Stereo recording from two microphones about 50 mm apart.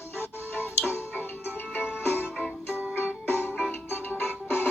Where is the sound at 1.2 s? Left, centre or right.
Left.